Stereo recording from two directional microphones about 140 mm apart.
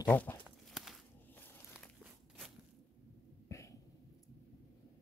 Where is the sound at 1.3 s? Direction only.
15° left (ahead or behind).